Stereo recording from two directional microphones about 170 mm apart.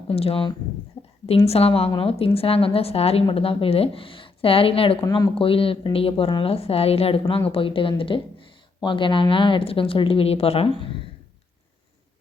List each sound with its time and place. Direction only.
0.1 s a woman's voice: 35° left (ahead or behind)
5.0 s speech: 20° left (ahead or behind)
5.3 s a woman's voice: 30° left (ahead or behind)